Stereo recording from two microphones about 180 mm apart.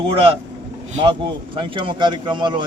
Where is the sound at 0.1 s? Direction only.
30° right (ahead or behind).